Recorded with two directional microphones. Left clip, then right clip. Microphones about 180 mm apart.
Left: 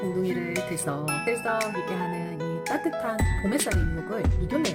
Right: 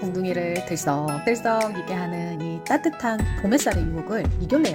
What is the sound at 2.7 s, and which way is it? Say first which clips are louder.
Speech: right 4 dB; 40° right (ahead or behind).